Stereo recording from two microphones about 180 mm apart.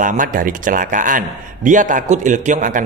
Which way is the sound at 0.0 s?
50° right (ahead or behind).